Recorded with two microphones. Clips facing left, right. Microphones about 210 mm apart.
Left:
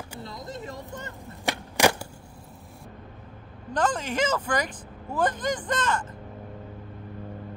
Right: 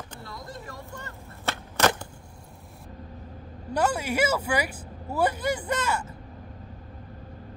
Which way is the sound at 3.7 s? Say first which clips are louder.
Right 1 dB; 10° right (ahead or behind).